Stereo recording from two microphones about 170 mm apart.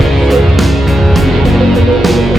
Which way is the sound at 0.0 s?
Centre (ahead or behind).